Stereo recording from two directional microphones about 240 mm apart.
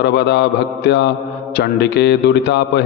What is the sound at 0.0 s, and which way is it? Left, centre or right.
Mantra, left.